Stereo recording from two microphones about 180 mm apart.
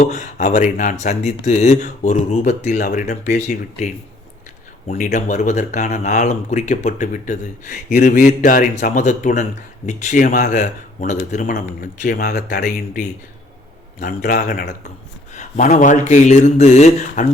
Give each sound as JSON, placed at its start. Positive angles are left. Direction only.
{"t": 0.0, "sound": "speech", "side_deg": 40}
{"t": 15.3, "sound": "speech", "side_deg": 40}